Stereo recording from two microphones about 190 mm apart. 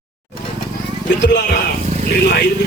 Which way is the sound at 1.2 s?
60° left (ahead or behind).